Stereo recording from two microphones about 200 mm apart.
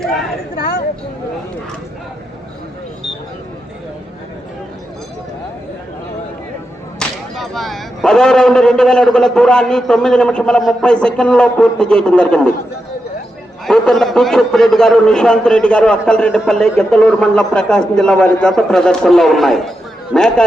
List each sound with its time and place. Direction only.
0.5 s a sound: 45° left (ahead or behind)
7.0 s a man's voice: centre (ahead or behind)
13.7 s a man's voice: centre (ahead or behind)